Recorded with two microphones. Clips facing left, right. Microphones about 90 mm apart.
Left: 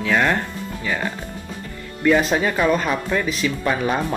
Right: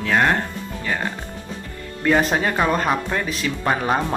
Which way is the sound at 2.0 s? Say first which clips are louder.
Left 1 dB; 35° right (ahead or behind).